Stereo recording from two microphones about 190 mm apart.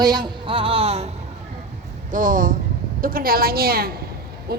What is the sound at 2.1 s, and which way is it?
A woman's voice, 45° right (ahead or behind).